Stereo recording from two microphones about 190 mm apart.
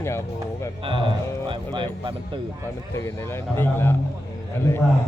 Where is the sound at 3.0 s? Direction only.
15° left (ahead or behind).